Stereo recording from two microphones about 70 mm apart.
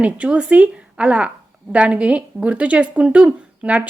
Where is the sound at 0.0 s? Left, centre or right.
Centre.